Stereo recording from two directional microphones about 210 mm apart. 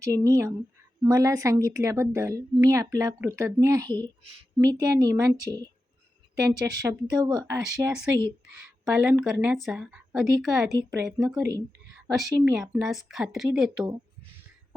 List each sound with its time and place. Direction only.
0.0 s a woman's voice: 15° right (ahead or behind)
6.8 s a woman's voice: 20° right (ahead or behind); by 10.7 s centre (ahead or behind)
10.7 s a woman's voice: 15° right (ahead or behind)
12.0 s a woman's voice: centre (ahead or behind)